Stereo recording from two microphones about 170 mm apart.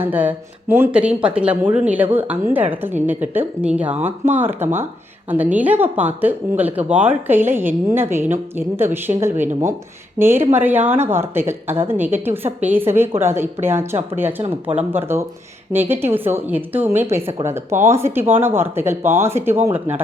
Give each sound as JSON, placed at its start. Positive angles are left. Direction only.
{"t": 0.0, "sound": "a woman's voice", "side_deg": -10}